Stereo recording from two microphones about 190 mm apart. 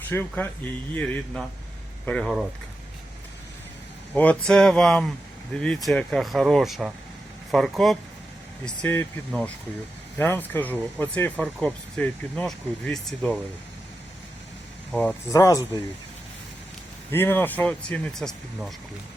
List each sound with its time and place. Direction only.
0.1 s speech: 10° left (ahead or behind)
4.1 s speech: 5° left (ahead or behind)
10.2 s speech: 10° left (ahead or behind)
15.3 s speech: 15° left (ahead or behind)
17.1 s speech: 10° left (ahead or behind)